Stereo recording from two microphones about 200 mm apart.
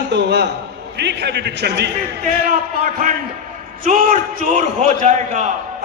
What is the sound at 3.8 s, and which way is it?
A man's voice, 40° right (ahead or behind).